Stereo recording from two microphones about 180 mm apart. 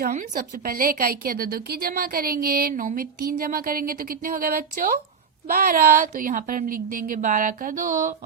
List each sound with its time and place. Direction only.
0.0 s a woman's voice: 50° right (ahead or behind)